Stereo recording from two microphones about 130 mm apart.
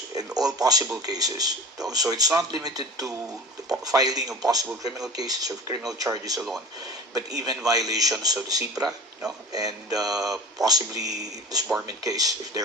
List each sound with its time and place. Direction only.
0.1 s speech: 30° right (ahead or behind)